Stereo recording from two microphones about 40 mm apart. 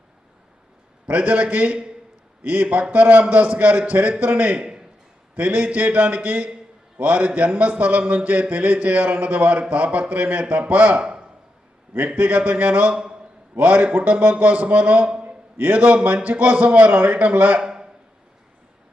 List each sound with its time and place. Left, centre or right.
1.0 s a man's voice: right
10.4 s speech: right
10.7 s a man's voice: right
11.0 s a sound: right
12.0 s a man's voice: right
12.9 s speech: right
13.6 s a man's voice: right
17.6 s a sound: centre